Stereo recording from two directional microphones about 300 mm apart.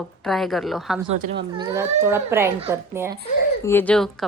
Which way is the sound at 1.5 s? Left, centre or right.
Centre.